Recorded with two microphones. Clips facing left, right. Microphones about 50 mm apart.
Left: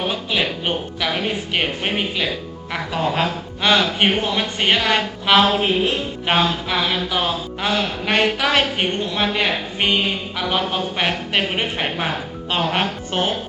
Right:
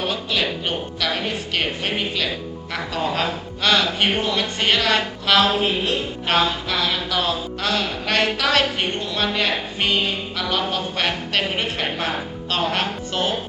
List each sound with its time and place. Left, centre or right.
0.1 s speech: centre